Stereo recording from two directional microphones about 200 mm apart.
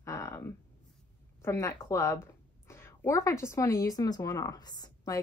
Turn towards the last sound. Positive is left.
turn(degrees=20)  # may be behind; listen again after turning